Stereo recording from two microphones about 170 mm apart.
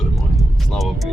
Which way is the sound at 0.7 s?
Centre (ahead or behind).